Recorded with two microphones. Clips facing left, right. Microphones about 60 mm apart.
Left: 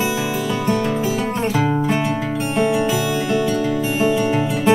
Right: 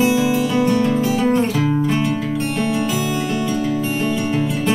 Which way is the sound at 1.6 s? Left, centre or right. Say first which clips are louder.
Even; centre.